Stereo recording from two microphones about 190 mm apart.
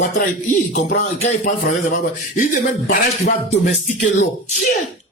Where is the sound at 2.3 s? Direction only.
45° left (ahead or behind).